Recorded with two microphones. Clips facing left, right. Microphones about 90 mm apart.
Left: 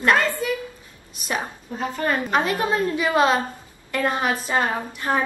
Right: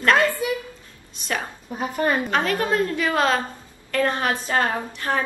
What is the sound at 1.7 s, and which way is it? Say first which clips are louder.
Speech: right 2 dB; 15° right (ahead or behind).